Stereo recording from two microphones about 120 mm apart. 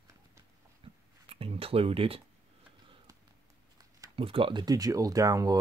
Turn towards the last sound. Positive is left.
turn(degrees=-30)  # may be behind; listen again after turning